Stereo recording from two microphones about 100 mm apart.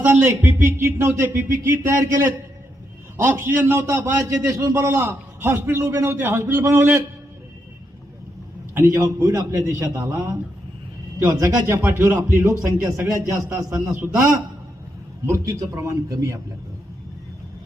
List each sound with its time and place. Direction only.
0.0 s a man's voice: 20° right (ahead or behind)
8.7 s a man's voice: 30° right (ahead or behind)
11.6 s a man's voice: 20° right (ahead or behind)
15.3 s a man's voice: 30° right (ahead or behind)